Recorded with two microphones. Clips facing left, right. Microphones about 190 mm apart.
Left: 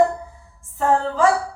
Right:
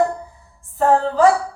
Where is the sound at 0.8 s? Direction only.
35° right (ahead or behind).